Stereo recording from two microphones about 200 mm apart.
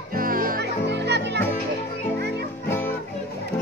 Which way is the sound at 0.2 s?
45° right (ahead or behind).